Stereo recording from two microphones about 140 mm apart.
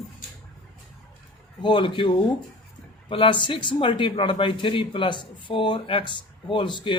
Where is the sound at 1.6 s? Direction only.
35° left (ahead or behind).